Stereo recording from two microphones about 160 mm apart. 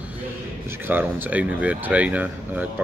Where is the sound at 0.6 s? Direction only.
15° right (ahead or behind).